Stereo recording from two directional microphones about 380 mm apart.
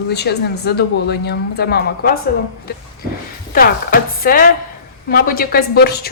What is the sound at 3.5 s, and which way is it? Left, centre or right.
Speech, left.